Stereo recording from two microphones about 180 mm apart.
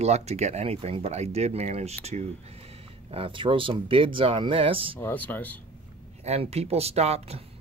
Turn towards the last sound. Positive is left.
turn(degrees=-35)  # may be behind; listen again after turning